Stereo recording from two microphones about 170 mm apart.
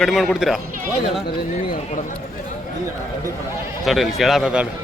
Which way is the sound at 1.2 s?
50° left (ahead or behind).